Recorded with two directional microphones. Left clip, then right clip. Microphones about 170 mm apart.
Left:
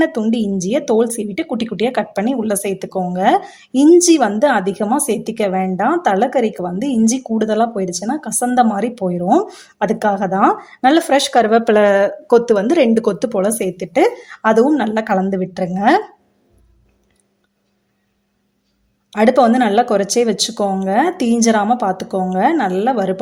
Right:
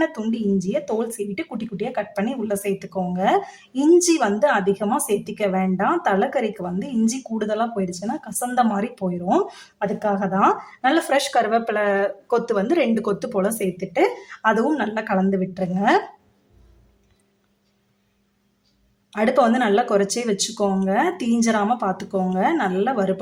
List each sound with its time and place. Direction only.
0.0 s speech: 30° left (ahead or behind)
9.7 s speech: 35° left (ahead or behind)
19.1 s speech: 30° left (ahead or behind)